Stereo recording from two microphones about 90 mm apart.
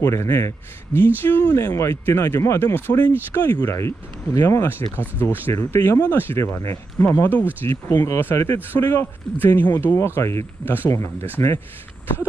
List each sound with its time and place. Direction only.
0.0 s speech: 30° left (ahead or behind)
3.6 s speech: 35° left (ahead or behind)
7.9 s speech: 35° left (ahead or behind)
8.2 s speech: 25° left (ahead or behind)